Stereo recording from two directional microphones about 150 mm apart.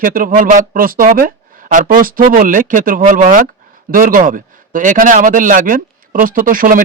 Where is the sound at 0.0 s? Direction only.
65° right (ahead or behind).